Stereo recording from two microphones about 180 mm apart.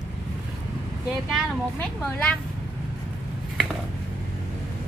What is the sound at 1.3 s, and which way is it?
Speech, 5° left (ahead or behind).